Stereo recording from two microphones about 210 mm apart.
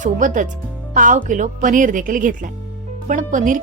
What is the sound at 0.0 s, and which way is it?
A woman's voice, 40° right (ahead or behind).